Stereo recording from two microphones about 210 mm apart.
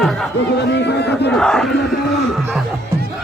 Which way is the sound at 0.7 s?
55° left (ahead or behind).